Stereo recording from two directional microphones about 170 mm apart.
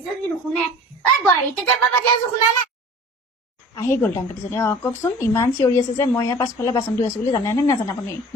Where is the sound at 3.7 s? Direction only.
15° left (ahead or behind).